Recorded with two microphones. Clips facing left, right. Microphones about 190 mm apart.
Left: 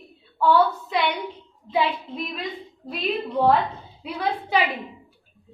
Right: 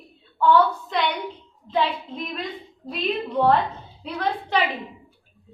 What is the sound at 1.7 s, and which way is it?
A woman's voice, 5° left (ahead or behind).